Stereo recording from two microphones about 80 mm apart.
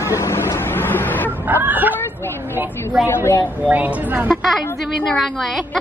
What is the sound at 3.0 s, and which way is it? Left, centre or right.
Speech, left.